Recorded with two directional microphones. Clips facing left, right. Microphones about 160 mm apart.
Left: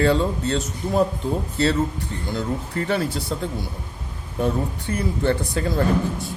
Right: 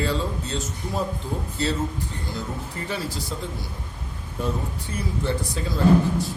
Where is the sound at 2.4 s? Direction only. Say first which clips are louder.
Left 8 dB; 60° left (ahead or behind).